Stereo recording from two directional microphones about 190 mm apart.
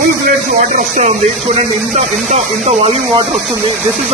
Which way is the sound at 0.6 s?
40° right (ahead or behind).